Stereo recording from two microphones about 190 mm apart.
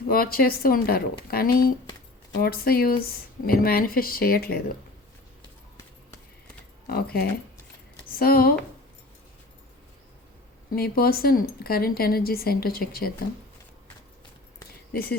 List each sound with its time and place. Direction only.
0.1 s speech: 50° left (ahead or behind)
6.8 s speech: 55° left (ahead or behind)
10.8 s speech: 50° left (ahead or behind)